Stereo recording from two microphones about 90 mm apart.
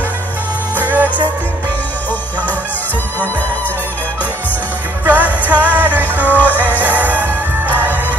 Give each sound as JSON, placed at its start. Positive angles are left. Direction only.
{"t": 0.7, "sound": "music", "side_deg": -20}
{"t": 5.0, "sound": "music", "side_deg": -20}